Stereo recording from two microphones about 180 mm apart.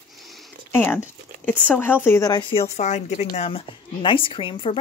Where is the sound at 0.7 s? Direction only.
10° left (ahead or behind).